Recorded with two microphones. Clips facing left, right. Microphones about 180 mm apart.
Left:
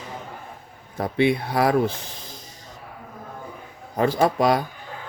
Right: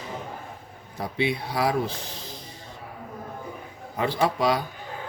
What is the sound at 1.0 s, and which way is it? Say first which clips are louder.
Speech: left 6 dB; 55° left (ahead or behind).